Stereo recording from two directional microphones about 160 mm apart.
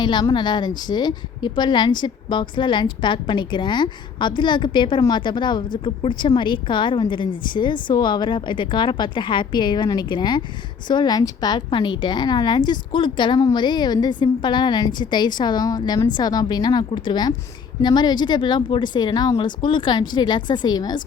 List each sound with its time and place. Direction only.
0.0 s a woman's voice: 25° left (ahead or behind)